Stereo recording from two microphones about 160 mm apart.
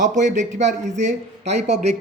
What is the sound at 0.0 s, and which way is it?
Speech, 50° right (ahead or behind).